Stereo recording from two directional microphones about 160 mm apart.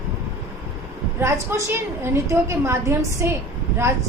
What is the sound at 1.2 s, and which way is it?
A woman's voice, 15° right (ahead or behind).